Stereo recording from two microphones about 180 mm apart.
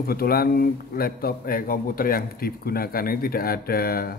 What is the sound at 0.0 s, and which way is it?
Speech, 55° left (ahead or behind).